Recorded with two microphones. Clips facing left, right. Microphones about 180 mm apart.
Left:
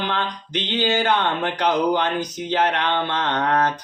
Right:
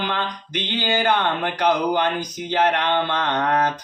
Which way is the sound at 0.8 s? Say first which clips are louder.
Left 1 dB; 50° right (ahead or behind).